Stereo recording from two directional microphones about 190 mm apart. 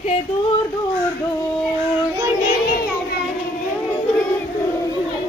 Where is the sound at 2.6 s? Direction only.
50° left (ahead or behind).